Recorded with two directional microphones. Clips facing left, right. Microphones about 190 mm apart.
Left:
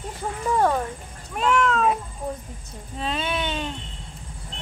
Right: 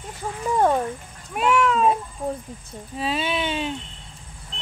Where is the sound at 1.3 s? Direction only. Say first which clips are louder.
Right 1 dB; 10° right (ahead or behind).